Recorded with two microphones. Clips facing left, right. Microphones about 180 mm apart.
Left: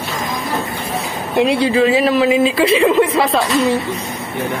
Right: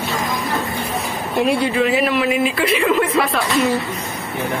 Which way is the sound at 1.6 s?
30° left (ahead or behind).